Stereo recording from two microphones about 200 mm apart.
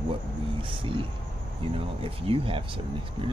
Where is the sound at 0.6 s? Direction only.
25° right (ahead or behind).